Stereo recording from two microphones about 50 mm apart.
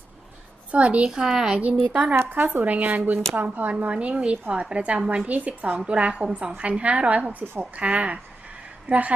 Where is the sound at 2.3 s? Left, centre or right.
Right.